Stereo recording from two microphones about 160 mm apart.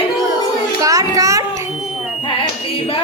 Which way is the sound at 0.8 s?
20° right (ahead or behind).